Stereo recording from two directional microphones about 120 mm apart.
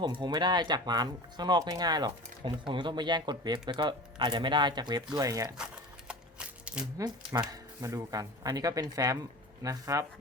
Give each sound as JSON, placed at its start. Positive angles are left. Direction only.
{"t": 0.0, "sound": "speech", "side_deg": -40}
{"t": 6.1, "sound": "a sound", "side_deg": -10}
{"t": 7.0, "sound": "speech", "side_deg": -35}
{"t": 7.5, "sound": "speech", "side_deg": -25}